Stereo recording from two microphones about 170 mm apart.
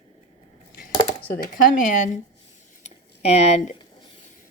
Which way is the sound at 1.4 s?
50° left (ahead or behind).